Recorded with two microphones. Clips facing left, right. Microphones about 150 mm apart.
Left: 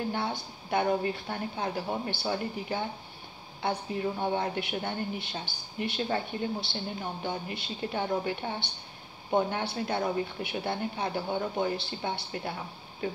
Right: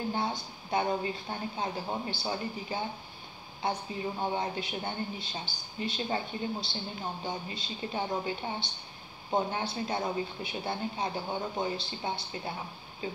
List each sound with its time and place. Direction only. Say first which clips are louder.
0.1 s a woman's voice: even; 65° left (ahead or behind)